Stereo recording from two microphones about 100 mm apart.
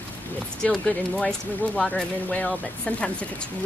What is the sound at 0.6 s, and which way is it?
Speech, 10° left (ahead or behind).